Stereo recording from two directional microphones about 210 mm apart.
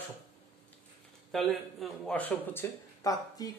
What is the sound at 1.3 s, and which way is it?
Speech, centre (ahead or behind).